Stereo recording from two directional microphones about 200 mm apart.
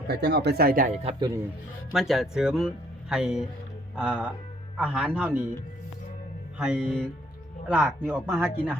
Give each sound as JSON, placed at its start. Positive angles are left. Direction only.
{"t": 0.1, "sound": "speech", "side_deg": -55}
{"t": 1.0, "sound": "a man's voice", "side_deg": -20}
{"t": 1.9, "sound": "speech", "side_deg": 0}
{"t": 6.7, "sound": "speech", "side_deg": -5}